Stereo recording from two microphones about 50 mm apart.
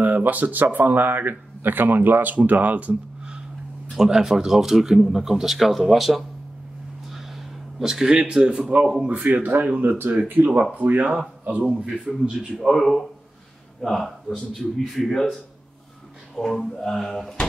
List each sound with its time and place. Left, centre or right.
0.0 s a man's voice: right
3.9 s speech: centre
7.8 s speech: centre
9.1 s a man's voice: right
12.1 s a man's voice: centre